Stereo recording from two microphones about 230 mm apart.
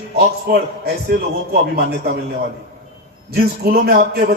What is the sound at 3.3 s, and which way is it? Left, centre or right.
A man's voice, right.